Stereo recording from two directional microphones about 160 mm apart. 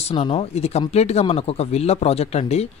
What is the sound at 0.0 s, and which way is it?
Speech, 40° left (ahead or behind).